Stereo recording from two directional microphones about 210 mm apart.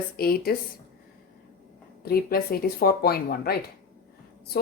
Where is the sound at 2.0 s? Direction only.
45° left (ahead or behind).